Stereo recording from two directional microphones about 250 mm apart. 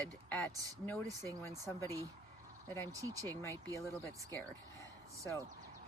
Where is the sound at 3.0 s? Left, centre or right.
Centre.